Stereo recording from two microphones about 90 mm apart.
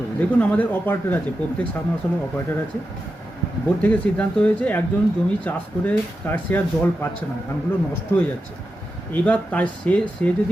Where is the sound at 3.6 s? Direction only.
15° left (ahead or behind).